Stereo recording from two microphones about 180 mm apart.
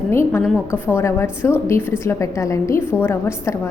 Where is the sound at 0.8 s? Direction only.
15° left (ahead or behind).